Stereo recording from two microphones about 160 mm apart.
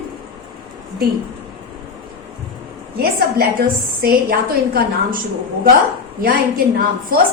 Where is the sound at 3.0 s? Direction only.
70° right (ahead or behind).